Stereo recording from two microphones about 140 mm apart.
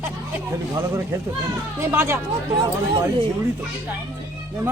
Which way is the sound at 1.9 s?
15° right (ahead or behind).